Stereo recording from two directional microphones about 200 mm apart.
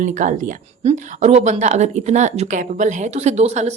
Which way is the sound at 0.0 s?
35° right (ahead or behind).